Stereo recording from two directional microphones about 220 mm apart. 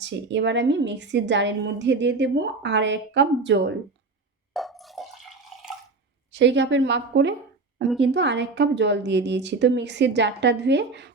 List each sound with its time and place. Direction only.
0.0 s a woman's voice: 55° right (ahead or behind)
4.5 s water: centre (ahead or behind)
5.5 s drip: centre (ahead or behind)
6.3 s a woman's voice: 55° right (ahead or behind)